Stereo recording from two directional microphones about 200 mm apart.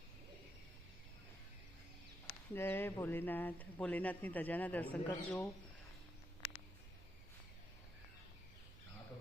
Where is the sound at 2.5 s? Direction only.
10° left (ahead or behind).